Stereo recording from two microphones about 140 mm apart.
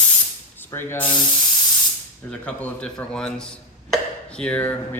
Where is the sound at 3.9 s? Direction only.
5° left (ahead or behind).